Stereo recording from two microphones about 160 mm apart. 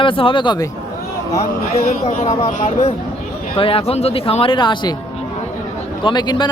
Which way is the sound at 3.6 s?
35° left (ahead or behind).